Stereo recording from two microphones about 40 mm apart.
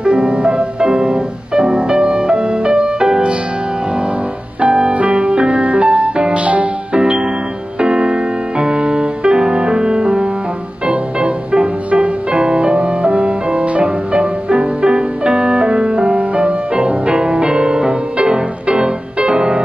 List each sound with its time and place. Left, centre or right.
0.0 s music: right
4.6 s music: right
7.0 s music: centre
16.2 s music: right
16.7 s music: right